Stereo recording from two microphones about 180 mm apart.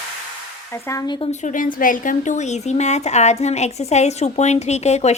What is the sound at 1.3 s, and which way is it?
A woman's voice, 45° left (ahead or behind).